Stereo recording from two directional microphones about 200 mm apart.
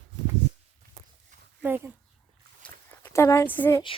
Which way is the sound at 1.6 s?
10° right (ahead or behind).